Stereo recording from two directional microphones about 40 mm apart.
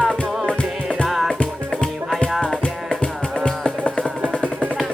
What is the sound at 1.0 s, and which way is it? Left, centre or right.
Music, centre.